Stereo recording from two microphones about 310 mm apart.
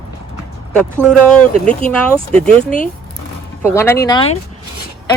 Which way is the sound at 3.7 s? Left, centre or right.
Centre.